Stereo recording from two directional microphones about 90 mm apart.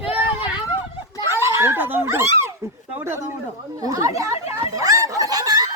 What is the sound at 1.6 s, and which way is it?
Dog, 25° right (ahead or behind).